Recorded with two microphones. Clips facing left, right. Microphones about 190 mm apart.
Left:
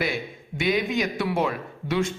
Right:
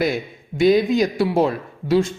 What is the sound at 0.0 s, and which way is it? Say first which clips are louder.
Speech: right 6 dB; 40° right (ahead or behind).